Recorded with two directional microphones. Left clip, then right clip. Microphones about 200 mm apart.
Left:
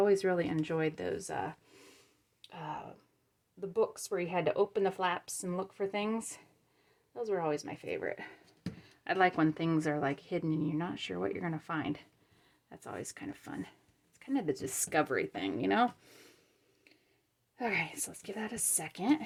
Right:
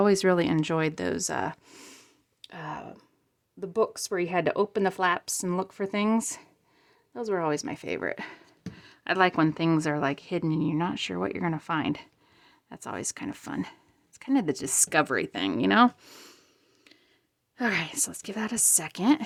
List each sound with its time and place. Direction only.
0.0 s speech: 40° right (ahead or behind)
8.7 s speech: 25° right (ahead or behind)
17.6 s a woman's voice: 30° right (ahead or behind)